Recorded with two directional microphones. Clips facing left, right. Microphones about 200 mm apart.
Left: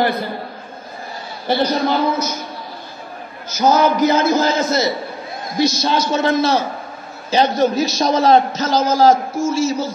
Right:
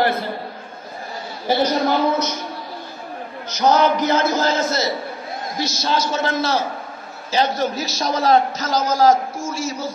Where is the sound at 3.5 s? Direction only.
5° left (ahead or behind).